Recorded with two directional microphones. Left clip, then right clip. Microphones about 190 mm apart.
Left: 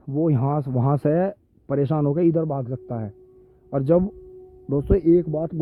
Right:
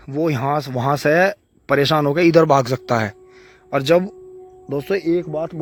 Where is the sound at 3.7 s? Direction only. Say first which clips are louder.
Right 4 dB; 5° right (ahead or behind).